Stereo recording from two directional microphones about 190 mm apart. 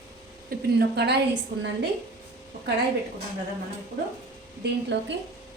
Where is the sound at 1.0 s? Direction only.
60° right (ahead or behind).